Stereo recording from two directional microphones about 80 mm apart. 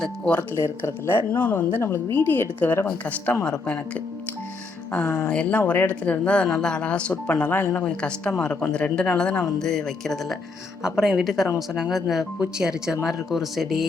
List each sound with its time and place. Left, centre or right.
0.5 s speech: left
3.4 s speech: centre
4.9 s speech: centre
5.5 s speech: left
7.9 s speech: centre
9.3 s speech: left
9.6 s speech: centre
10.8 s speech: centre